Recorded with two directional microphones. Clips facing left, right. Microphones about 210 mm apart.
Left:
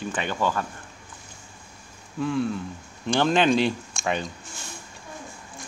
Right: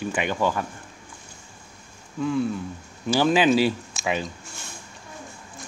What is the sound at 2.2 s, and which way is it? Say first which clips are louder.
Speech: right 1 dB; centre (ahead or behind).